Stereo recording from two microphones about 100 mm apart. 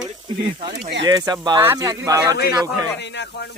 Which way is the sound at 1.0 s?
40° right (ahead or behind).